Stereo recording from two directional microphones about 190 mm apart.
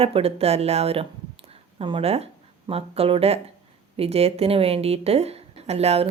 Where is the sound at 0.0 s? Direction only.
30° right (ahead or behind).